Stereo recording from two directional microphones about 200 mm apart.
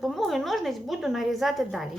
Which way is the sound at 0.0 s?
Centre (ahead or behind).